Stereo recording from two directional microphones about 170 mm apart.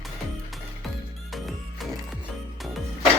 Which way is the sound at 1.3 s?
Centre (ahead or behind).